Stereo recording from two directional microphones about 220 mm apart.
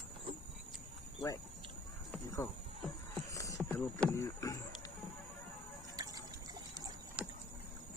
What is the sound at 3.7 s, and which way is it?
Speech, 10° left (ahead or behind).